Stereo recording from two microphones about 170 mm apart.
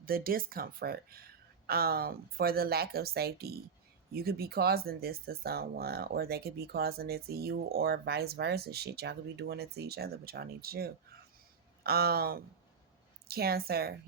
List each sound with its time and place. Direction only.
0.0 s speech: 60° right (ahead or behind)